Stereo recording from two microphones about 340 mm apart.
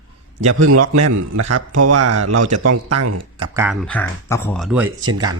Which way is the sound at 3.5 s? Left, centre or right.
Centre.